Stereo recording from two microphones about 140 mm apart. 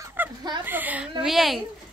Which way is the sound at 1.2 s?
Centre (ahead or behind).